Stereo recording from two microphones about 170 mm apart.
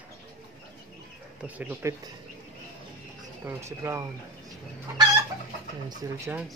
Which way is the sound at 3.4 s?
15° right (ahead or behind).